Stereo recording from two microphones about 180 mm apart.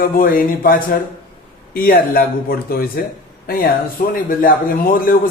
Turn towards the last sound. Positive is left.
turn(degrees=50)  # may be behind; listen again after turning